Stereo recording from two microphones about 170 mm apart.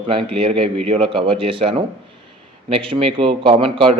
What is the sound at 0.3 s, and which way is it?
A man's voice, 30° right (ahead or behind).